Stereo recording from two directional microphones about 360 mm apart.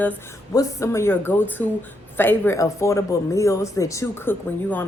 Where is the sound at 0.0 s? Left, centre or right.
Centre.